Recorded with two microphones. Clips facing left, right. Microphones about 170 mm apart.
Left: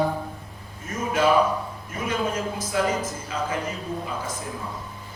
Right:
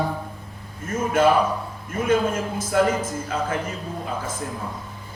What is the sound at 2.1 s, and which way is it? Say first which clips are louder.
Speech: right 5 dB; 50° right (ahead or behind).